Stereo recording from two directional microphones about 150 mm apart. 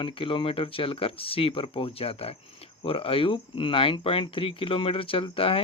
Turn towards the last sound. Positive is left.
turn(degrees=40)  # may be behind; listen again after turning